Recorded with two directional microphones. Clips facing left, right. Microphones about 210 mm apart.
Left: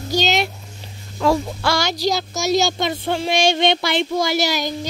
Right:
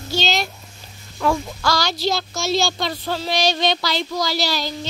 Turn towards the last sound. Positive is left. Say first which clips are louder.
# left 3 dB
turn(degrees=20)  # may be behind; listen again after turning